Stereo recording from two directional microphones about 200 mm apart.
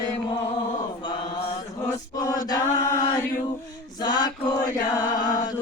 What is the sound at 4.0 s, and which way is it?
Mantra, 20° left (ahead or behind).